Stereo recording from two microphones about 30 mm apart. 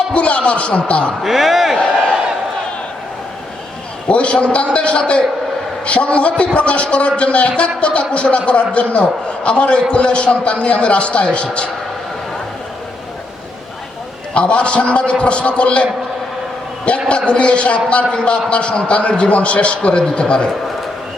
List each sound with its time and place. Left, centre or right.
0.1 s a man's voice: left
1.2 s speech: centre
4.1 s a man's voice: left
14.3 s a man's voice: left
17.1 s a man's voice: left